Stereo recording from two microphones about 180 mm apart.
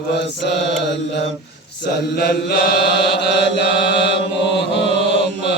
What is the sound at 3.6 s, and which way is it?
Mantra, 70° left (ahead or behind).